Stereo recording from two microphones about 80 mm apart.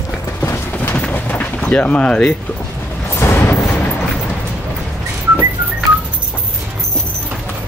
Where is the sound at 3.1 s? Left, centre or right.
Left.